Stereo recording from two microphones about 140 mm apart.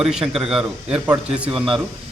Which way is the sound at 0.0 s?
5° right (ahead or behind).